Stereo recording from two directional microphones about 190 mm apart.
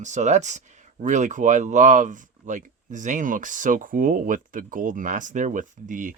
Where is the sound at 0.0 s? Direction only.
40° right (ahead or behind).